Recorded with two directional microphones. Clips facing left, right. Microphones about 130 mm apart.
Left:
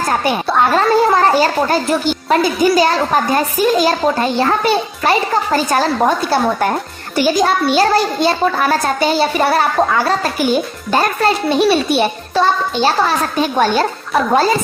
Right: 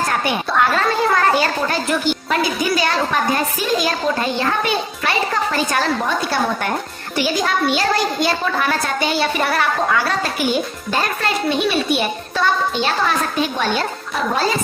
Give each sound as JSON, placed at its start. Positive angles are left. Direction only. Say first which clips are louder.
{"t": 0.1, "sound": "a child's voice", "louder": "left 4 dB", "side_deg": 30}